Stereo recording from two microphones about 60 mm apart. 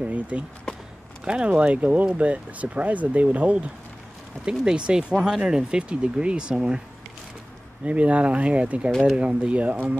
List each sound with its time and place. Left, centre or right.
0.0 s speech: right
7.8 s speech: right